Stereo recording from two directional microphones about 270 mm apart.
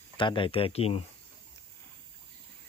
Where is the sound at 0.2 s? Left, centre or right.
Centre.